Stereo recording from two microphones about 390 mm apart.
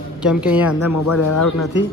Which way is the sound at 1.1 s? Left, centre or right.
Left.